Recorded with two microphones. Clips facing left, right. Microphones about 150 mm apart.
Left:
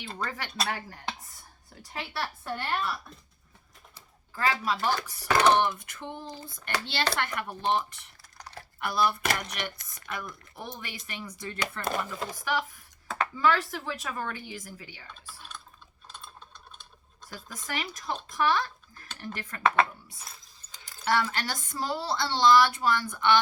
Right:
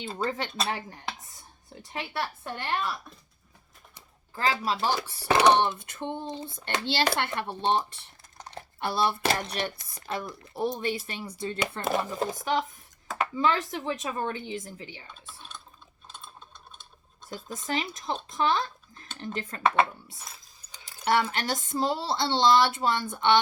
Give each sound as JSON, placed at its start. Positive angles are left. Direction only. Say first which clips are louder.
{"t": 0.2, "sound": "speech", "louder": "right 6 dB", "side_deg": -25}
{"t": 1.7, "sound": "speech", "louder": "right 3 dB", "side_deg": -20}
{"t": 4.4, "sound": "speech", "louder": "right 1 dB", "side_deg": -30}
{"t": 17.2, "sound": "speech", "louder": "right 6 dB", "side_deg": -25}